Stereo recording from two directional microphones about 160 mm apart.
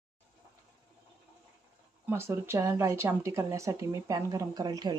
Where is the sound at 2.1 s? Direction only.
15° right (ahead or behind).